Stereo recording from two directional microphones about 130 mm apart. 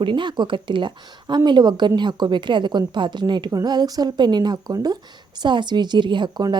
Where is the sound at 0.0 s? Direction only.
40° right (ahead or behind).